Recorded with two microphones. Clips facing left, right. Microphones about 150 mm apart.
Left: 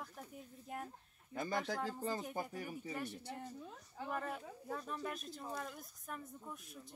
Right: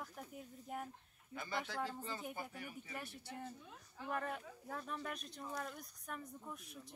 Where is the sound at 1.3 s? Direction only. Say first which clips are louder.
Left 4 dB; 40° left (ahead or behind).